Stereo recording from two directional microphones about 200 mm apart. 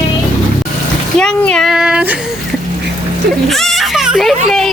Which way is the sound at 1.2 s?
5° left (ahead or behind).